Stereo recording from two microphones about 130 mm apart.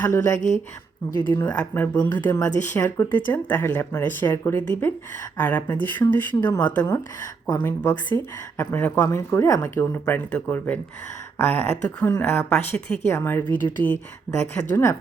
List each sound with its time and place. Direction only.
0.0 s speech: 15° left (ahead or behind)